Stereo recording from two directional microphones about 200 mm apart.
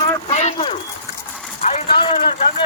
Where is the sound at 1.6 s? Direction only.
35° left (ahead or behind).